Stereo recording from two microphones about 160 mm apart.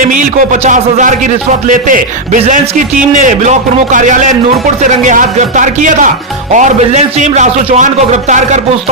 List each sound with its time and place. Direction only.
0.7 s a man's voice: 55° right (ahead or behind)